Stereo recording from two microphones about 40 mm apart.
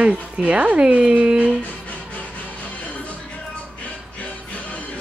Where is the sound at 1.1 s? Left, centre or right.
Right.